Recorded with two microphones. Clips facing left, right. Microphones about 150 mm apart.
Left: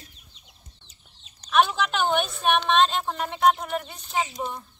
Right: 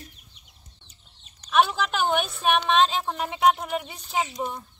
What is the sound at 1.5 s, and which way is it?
A woman's voice, 5° right (ahead or behind).